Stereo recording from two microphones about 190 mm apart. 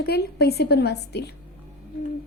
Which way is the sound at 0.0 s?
55° left (ahead or behind).